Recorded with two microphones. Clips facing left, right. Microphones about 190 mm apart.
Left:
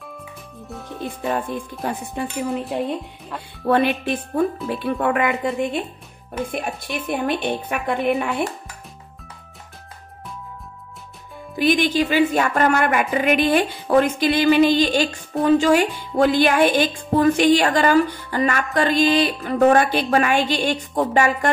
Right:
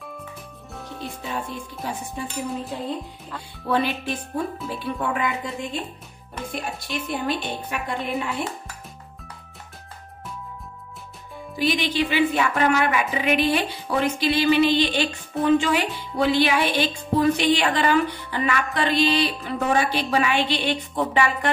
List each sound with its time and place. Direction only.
0.0 s music: centre (ahead or behind)
1.2 s speech: 55° left (ahead or behind)
3.3 s speech: 60° left (ahead or behind)
11.5 s a woman's voice: 50° left (ahead or behind)